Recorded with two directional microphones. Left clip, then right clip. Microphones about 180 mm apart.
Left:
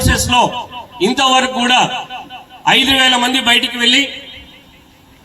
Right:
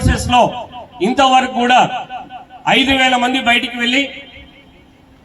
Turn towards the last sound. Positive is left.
turn(degrees=-25)  # may be behind; listen again after turning